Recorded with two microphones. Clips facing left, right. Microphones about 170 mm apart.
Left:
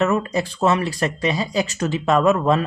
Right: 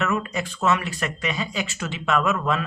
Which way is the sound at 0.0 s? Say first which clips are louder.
Left 6 dB; 35° left (ahead or behind).